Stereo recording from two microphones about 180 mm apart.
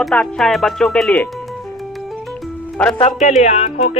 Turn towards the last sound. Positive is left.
turn(degrees=40)  # may be behind; listen again after turning